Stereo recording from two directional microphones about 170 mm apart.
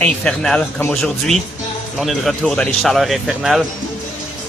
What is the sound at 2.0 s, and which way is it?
Speech, centre (ahead or behind).